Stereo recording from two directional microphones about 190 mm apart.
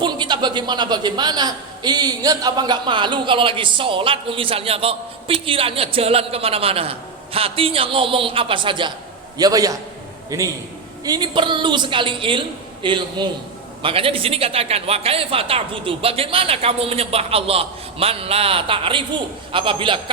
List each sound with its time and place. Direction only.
0.0 s a man's voice: 25° right (ahead or behind)